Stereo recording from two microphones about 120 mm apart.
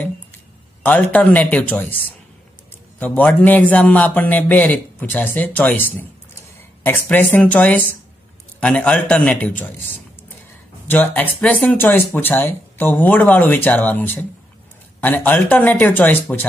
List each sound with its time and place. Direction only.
0.8 s a man's voice: 10° left (ahead or behind)
10.9 s a man's voice: 15° left (ahead or behind)